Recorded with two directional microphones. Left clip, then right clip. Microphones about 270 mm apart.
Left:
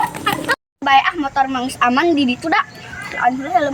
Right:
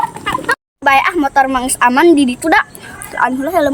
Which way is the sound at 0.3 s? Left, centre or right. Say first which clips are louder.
Right 2 dB; centre.